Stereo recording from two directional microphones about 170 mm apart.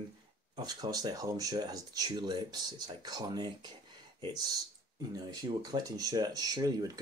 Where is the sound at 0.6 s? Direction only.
25° right (ahead or behind).